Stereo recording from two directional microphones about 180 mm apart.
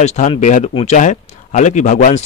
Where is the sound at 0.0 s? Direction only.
40° left (ahead or behind).